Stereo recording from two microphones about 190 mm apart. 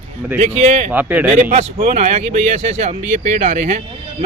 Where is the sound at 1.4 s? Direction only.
45° right (ahead or behind).